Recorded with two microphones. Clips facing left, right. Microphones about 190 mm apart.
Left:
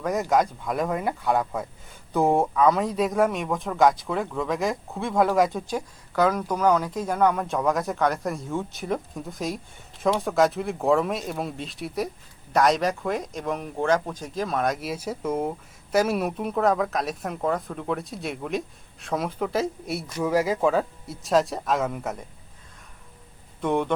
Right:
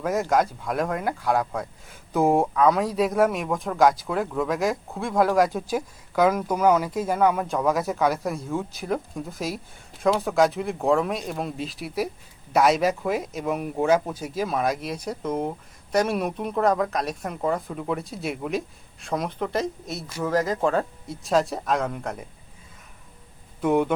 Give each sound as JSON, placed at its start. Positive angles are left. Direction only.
{"t": 0.0, "sound": "speech", "side_deg": 0}
{"t": 23.6, "sound": "speech", "side_deg": -5}